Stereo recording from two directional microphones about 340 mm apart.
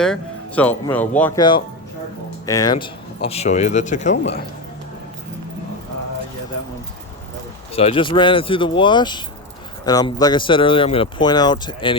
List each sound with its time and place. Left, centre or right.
0.0 s speech: centre; by 4.4 s left
7.7 s speech: centre